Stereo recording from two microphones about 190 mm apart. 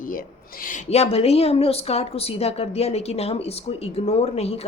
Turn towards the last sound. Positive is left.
turn(degrees=35)  # may be behind; listen again after turning